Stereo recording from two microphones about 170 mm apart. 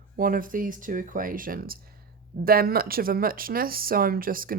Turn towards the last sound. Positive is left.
turn(degrees=-55)  # may be behind; listen again after turning